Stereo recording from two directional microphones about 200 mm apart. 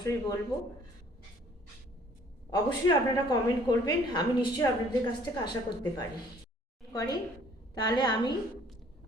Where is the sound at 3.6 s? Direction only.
20° left (ahead or behind).